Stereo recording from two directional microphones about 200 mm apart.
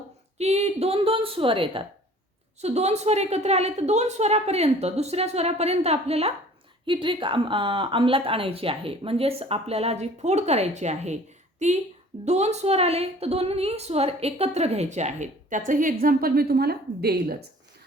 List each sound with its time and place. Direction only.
0.3 s a woman's voice: 30° right (ahead or behind); by 17.3 s 50° right (ahead or behind)